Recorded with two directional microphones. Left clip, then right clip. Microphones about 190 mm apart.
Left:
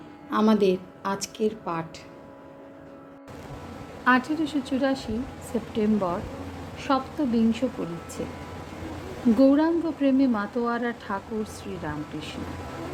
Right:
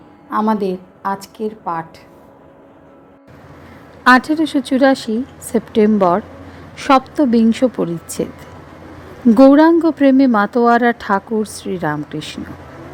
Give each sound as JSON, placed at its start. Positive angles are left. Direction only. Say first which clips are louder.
{"t": 0.3, "sound": "a woman's voice", "louder": "right 5 dB", "side_deg": -10}
{"t": 4.0, "sound": "a woman's voice", "louder": "right 11 dB", "side_deg": -40}
{"t": 9.4, "sound": "speech", "louder": "right 13 dB", "side_deg": -45}